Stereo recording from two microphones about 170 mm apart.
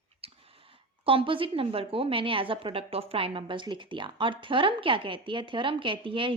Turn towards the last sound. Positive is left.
turn(degrees=-30)  # may be behind; listen again after turning